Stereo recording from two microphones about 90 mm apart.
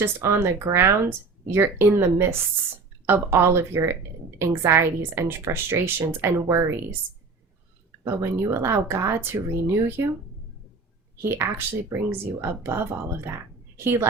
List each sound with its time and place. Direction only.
0.0 s speech: 30° right (ahead or behind)
8.0 s speech: 25° right (ahead or behind)
11.2 s speech: 25° right (ahead or behind)